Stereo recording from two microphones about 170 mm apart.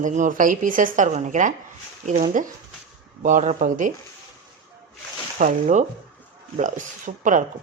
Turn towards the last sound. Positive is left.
turn(degrees=-50)  # may be behind; listen again after turning